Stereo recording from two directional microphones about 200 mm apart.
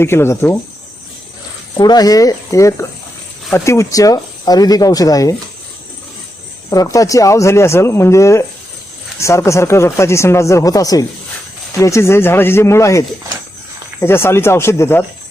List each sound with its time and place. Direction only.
0.0 s speech: 10° left (ahead or behind)
1.8 s speech: 20° left (ahead or behind)
6.7 s speech: 15° left (ahead or behind)